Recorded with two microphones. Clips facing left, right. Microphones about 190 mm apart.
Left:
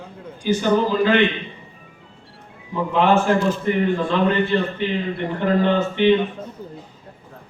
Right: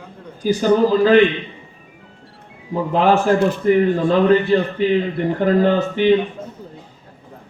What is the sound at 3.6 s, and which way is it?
Speech, 40° right (ahead or behind).